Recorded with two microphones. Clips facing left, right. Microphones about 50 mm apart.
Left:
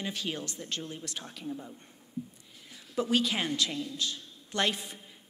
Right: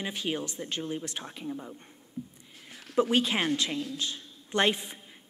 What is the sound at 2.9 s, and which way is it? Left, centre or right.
A man's voice, right.